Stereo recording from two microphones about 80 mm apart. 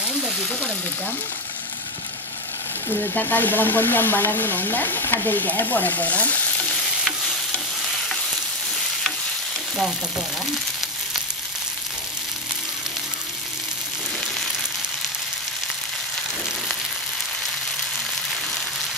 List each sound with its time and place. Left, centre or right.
2.9 s stir: left
9.8 s frying: centre